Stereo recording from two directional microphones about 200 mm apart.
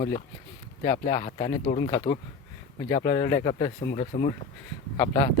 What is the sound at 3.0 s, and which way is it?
Speech, 20° left (ahead or behind).